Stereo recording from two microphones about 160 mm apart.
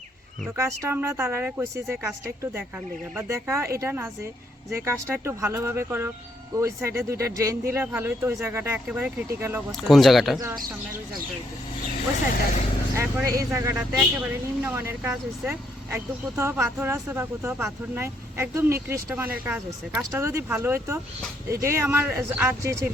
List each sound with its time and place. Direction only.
0.5 s speech: 15° right (ahead or behind)
9.7 s speech: centre (ahead or behind)
13.0 s speech: 15° right (ahead or behind)
13.9 s speech: 5° right (ahead or behind)
20.0 s speech: 20° right (ahead or behind)